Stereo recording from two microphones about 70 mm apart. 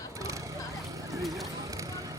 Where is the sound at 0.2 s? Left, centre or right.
Right.